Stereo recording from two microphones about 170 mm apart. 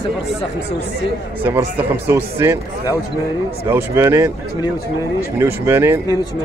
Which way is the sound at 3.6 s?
15° right (ahead or behind).